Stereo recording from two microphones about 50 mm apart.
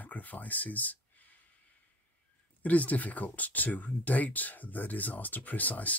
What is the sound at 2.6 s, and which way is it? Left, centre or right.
Speech, left.